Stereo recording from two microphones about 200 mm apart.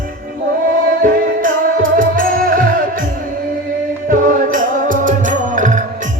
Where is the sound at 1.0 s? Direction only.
45° right (ahead or behind).